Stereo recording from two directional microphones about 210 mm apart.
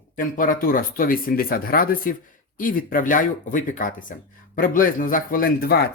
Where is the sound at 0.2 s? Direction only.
40° left (ahead or behind).